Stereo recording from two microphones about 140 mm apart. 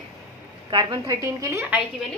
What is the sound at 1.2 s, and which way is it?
Speech, 20° right (ahead or behind).